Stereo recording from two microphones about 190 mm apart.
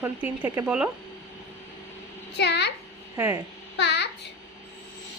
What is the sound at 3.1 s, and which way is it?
Speech, 10° right (ahead or behind).